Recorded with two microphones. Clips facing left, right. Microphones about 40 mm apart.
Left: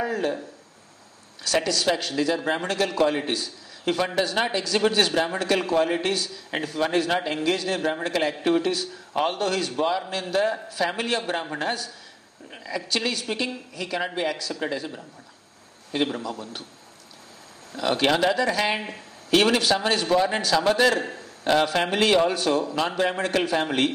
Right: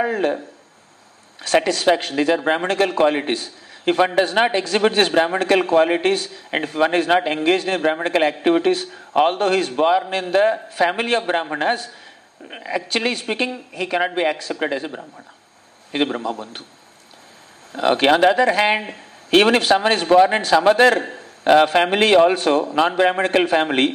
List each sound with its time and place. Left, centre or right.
0.0 s speech: right
1.4 s speech: right
17.7 s speech: right